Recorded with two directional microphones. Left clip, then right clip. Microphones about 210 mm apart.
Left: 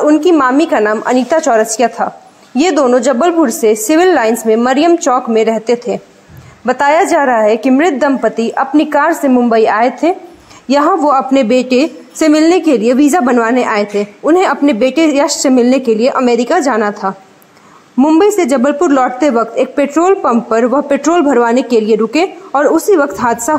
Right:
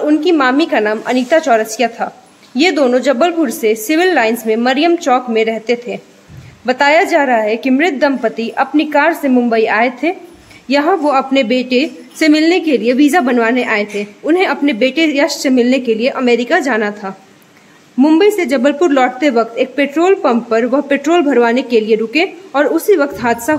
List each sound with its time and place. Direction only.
0.0 s a woman's voice: 5° left (ahead or behind)